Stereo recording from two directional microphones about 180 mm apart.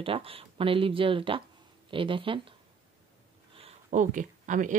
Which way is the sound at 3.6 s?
40° right (ahead or behind).